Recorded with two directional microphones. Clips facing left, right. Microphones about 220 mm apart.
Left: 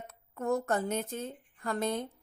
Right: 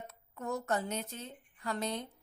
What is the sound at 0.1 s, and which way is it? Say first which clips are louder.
A woman's voice: left 8 dB; 55° left (ahead or behind).